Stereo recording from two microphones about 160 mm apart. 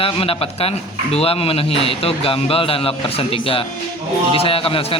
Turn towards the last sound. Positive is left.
turn(degrees=35)  # may be behind; listen again after turning